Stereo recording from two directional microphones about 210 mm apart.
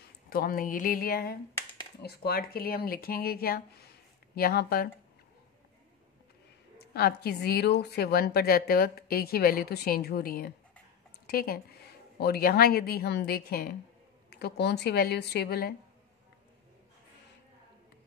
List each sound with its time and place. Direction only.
0.3 s a woman's voice: 45° left (ahead or behind)
6.8 s a woman's voice: 50° left (ahead or behind)